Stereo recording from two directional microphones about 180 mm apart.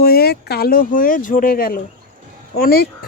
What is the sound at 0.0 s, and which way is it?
Speech, 60° left (ahead or behind).